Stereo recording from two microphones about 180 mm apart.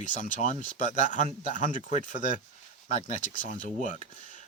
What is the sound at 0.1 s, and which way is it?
Speech, 45° left (ahead or behind).